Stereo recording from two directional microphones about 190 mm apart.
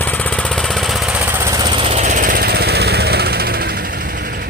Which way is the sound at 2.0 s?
40° right (ahead or behind).